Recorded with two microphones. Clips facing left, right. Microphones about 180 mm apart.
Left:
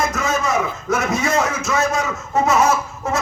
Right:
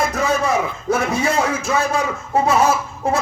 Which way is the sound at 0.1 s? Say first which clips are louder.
Right 2 dB; 30° right (ahead or behind).